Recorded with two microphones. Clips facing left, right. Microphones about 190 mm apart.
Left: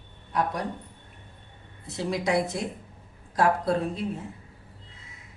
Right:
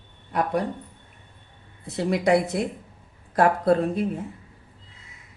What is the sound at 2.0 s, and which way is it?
A woman's voice, 60° right (ahead or behind).